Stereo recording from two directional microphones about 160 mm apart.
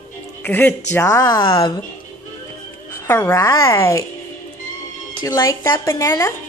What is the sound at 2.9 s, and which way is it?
A child's voice, 15° left (ahead or behind).